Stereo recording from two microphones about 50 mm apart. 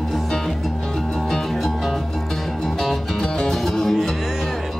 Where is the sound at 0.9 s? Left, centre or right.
Centre.